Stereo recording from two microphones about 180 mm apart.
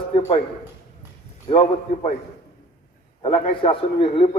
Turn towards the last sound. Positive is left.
turn(degrees=30)  # may be behind; listen again after turning